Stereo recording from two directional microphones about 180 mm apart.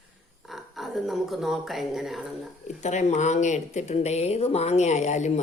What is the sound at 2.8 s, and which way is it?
Speech, 40° left (ahead or behind).